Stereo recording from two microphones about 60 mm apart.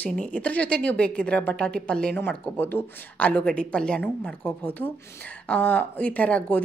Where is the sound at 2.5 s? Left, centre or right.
Left.